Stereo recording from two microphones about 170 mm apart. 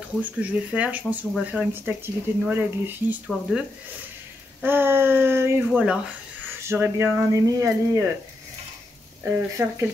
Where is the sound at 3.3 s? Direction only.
Centre (ahead or behind).